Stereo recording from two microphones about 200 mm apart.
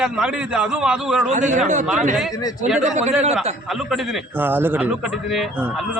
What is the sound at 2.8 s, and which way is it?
Speech, 35° right (ahead or behind).